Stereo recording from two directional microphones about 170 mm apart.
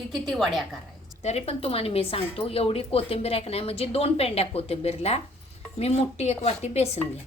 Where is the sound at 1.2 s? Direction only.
35° left (ahead or behind).